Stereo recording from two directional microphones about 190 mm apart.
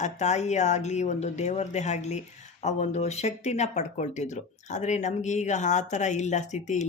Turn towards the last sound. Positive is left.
turn(degrees=40)  # may be behind; listen again after turning